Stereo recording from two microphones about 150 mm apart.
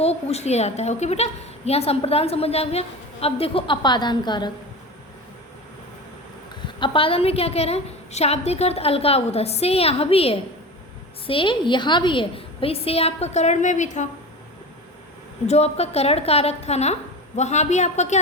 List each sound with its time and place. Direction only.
0.0 s a woman's voice: 45° left (ahead or behind)
6.7 s a woman's voice: 35° left (ahead or behind); by 14.1 s 50° left (ahead or behind)
15.4 s a woman's voice: 45° left (ahead or behind)